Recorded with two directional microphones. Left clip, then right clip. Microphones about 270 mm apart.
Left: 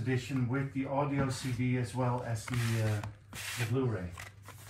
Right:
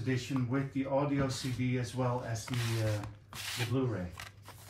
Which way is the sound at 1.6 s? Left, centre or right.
Left.